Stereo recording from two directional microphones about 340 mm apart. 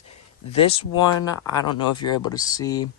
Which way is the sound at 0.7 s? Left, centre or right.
Centre.